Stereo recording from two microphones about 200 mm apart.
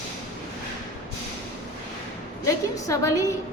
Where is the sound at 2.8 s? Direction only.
15° left (ahead or behind).